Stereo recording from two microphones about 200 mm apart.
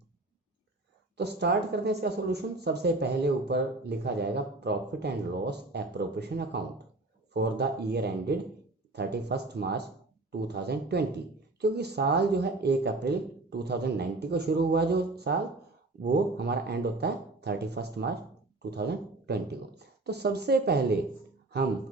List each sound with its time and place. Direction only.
1.1 s speech: 55° right (ahead or behind)